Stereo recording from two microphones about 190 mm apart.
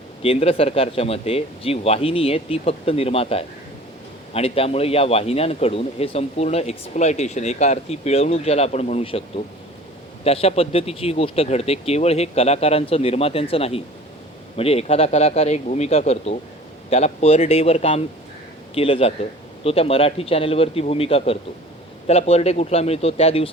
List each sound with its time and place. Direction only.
0.2 s a man's voice: 30° left (ahead or behind)
10.2 s a man's voice: 30° left (ahead or behind)